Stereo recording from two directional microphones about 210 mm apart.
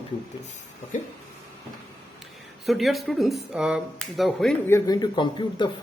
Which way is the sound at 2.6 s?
Centre (ahead or behind).